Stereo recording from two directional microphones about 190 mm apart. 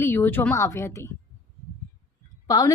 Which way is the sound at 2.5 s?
20° left (ahead or behind).